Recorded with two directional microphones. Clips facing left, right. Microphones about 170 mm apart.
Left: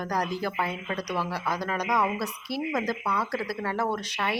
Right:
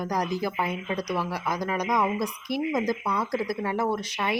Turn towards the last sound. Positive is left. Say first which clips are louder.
# right 2 dB
turn(degrees=-10)  # may be behind; listen again after turning